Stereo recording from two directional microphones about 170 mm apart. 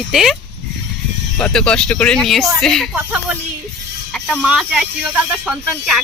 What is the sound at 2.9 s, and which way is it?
Speech, 10° right (ahead or behind).